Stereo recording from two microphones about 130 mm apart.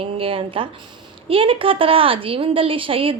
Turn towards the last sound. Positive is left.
turn(degrees=-45)  # may be behind; listen again after turning